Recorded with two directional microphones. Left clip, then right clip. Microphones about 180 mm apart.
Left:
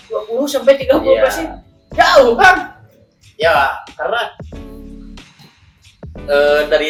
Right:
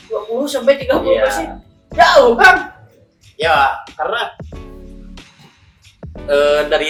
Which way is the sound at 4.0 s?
20° right (ahead or behind).